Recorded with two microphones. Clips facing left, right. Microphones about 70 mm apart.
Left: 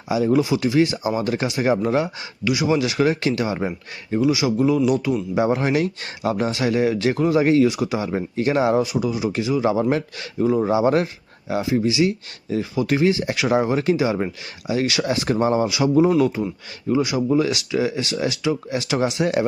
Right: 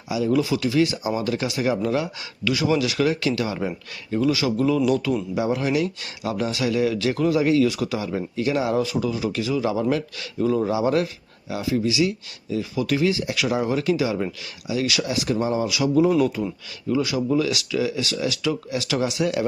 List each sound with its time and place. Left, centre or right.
0.1 s speech: left
2.4 s speech: centre
4.1 s speech: centre; by 7.7 s left
7.7 s speech: left
8.8 s speech: centre